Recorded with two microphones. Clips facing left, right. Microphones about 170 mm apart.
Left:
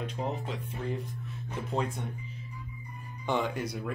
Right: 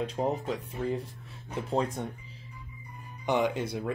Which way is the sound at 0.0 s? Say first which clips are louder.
Right 5 dB; 35° right (ahead or behind).